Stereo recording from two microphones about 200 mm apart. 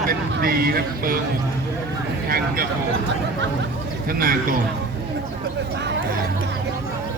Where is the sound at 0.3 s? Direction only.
50° right (ahead or behind).